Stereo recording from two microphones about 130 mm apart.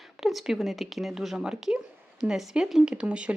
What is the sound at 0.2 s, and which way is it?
Speech, centre (ahead or behind).